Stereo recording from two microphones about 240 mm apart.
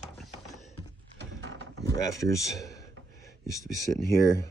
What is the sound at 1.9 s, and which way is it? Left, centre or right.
Speech, centre.